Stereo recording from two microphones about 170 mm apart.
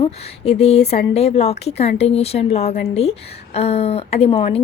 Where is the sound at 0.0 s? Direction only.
35° left (ahead or behind).